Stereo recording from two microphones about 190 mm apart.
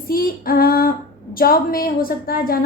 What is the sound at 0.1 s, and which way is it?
Female singing, 50° left (ahead or behind).